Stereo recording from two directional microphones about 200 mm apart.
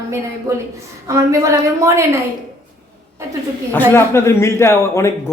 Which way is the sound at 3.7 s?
10° left (ahead or behind).